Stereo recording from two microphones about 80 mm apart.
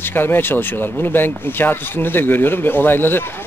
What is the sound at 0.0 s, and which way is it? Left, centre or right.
Speech, left.